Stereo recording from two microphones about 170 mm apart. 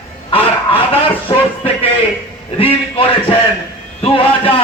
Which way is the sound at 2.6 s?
35° left (ahead or behind).